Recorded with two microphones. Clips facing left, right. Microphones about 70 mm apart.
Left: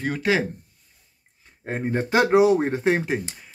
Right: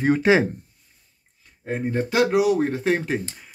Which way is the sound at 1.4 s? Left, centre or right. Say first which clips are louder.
Right 1 dB; left.